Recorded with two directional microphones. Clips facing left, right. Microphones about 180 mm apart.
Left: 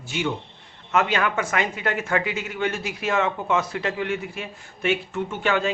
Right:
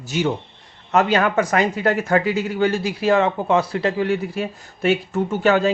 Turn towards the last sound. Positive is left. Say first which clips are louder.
# right 6 dB
turn(degrees=-40)  # may be behind; listen again after turning